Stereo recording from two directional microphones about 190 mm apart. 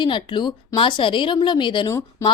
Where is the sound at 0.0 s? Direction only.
25° left (ahead or behind).